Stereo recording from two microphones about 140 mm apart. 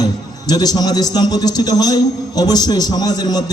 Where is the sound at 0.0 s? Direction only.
30° left (ahead or behind).